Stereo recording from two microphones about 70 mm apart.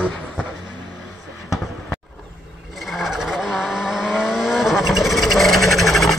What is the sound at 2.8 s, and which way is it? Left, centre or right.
Vehicle, centre.